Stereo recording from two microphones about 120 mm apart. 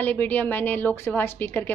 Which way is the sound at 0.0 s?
15° left (ahead or behind).